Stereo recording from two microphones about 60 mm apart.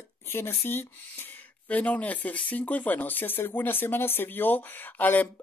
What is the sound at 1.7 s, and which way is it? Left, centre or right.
Speech, left.